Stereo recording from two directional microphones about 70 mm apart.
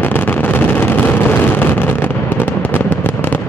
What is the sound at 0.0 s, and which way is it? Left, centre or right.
Vehicle, left.